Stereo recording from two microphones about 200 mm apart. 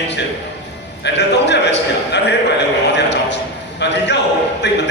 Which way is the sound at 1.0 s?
60° left (ahead or behind).